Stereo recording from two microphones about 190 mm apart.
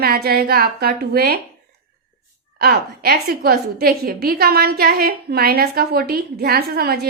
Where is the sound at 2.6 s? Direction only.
55° right (ahead or behind).